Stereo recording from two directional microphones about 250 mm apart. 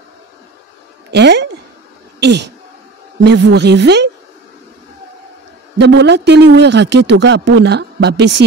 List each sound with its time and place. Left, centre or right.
1.1 s a woman's voice: right
5.8 s speech: right